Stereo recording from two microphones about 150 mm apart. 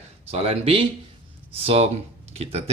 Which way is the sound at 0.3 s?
45° right (ahead or behind).